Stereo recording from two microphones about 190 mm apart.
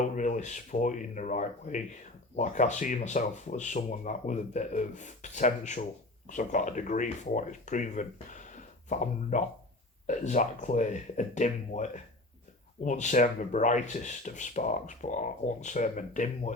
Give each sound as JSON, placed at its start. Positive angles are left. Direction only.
{"t": 0.0, "sound": "speech", "side_deg": 40}